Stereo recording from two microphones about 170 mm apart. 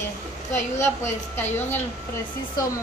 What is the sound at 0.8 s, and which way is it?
Speech, 15° left (ahead or behind).